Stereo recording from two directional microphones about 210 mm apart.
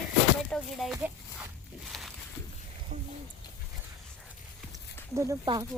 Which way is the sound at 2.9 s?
35° right (ahead or behind).